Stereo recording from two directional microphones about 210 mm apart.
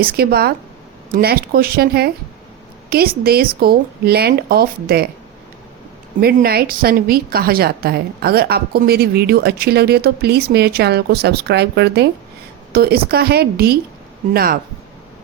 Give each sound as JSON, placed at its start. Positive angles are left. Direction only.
{"t": 0.0, "sound": "a woman's voice", "side_deg": -45}
{"t": 6.1, "sound": "a woman's voice", "side_deg": -45}